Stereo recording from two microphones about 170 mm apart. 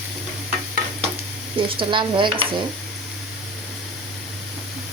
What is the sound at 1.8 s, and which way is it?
Speech, 30° right (ahead or behind).